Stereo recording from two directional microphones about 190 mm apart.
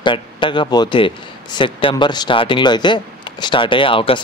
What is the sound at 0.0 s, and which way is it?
A man's voice, 25° left (ahead or behind).